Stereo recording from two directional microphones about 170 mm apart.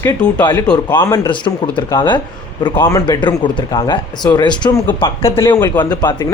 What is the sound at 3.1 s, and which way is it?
A man's voice, 25° left (ahead or behind).